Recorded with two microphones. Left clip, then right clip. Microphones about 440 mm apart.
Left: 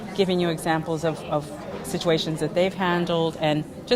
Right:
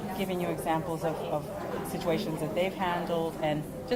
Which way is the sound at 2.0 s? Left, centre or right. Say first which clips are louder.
Left 8 dB; left.